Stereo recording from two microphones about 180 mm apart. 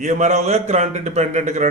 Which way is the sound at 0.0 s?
40° right (ahead or behind).